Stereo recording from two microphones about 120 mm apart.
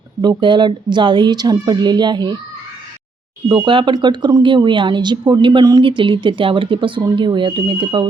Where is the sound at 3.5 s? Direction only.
40° right (ahead or behind).